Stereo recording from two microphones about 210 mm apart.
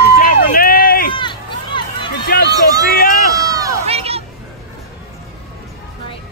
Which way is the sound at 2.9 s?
45° left (ahead or behind).